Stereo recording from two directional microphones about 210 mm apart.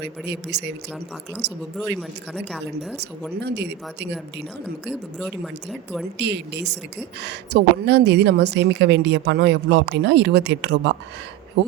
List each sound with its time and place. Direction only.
0.0 s speech: 55° right (ahead or behind)
2.5 s speech: centre (ahead or behind)
3.4 s speech: 55° right (ahead or behind)
6.1 s a woman's voice: 55° right (ahead or behind)